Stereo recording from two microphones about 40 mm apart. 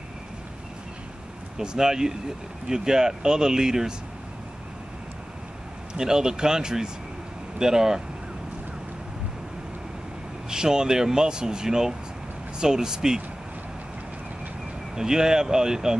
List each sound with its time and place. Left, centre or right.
1.6 s speech: centre
5.9 s speech: centre
10.5 s speech: centre
15.0 s speech: centre